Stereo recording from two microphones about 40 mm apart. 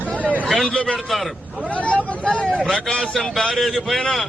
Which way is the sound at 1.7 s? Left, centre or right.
Left.